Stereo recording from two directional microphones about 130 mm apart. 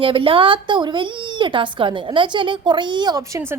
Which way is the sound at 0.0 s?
40° right (ahead or behind).